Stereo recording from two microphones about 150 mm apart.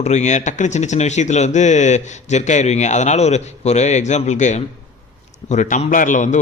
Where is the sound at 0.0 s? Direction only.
50° left (ahead or behind).